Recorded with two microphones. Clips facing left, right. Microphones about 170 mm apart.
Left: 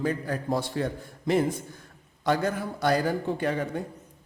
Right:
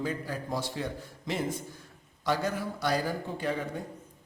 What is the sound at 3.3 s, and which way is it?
Speech, 70° left (ahead or behind).